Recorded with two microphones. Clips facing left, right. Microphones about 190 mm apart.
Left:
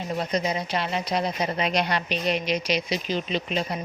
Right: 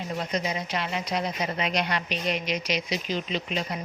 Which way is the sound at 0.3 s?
35° left (ahead or behind).